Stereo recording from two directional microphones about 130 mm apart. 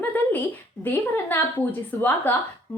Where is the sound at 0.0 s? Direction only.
15° left (ahead or behind).